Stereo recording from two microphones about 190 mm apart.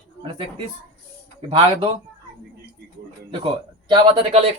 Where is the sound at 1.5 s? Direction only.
25° right (ahead or behind).